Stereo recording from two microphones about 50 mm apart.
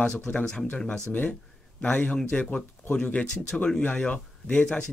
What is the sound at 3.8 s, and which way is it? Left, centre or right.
Speech, left.